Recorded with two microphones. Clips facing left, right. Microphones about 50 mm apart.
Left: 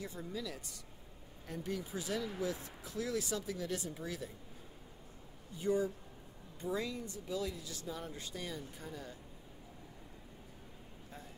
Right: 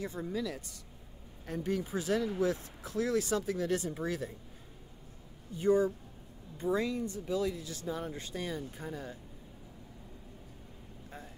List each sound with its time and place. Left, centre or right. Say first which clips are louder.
0.0 s speech: right 7 dB; right
5.6 s speech: right 6 dB; right